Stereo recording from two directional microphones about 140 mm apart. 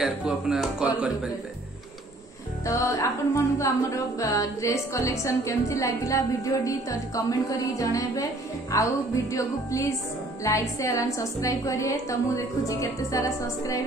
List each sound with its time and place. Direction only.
0.0 s speech: 5° right (ahead or behind)
2.6 s a woman's voice: 20° left (ahead or behind)